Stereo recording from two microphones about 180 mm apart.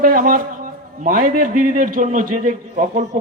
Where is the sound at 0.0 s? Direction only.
50° right (ahead or behind).